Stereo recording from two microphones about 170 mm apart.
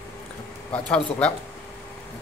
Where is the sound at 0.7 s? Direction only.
5° left (ahead or behind).